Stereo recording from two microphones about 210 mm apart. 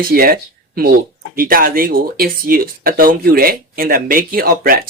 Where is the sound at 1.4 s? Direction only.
45° right (ahead or behind).